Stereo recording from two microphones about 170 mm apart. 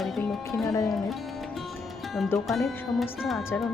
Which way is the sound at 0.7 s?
20° left (ahead or behind).